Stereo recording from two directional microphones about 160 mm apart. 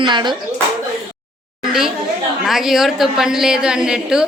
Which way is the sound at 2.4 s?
Centre (ahead or behind).